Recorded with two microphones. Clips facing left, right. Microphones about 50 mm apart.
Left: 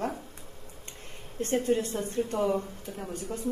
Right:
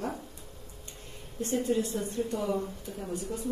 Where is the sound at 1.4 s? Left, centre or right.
Left.